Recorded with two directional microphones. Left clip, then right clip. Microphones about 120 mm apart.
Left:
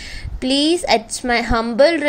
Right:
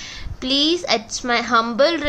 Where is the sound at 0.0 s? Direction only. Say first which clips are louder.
Left 3 dB; 30° left (ahead or behind).